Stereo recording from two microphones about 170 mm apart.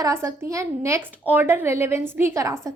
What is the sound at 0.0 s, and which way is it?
A woman's voice, 15° right (ahead or behind).